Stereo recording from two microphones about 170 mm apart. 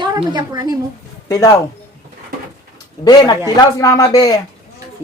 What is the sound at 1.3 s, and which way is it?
Speech, 20° left (ahead or behind).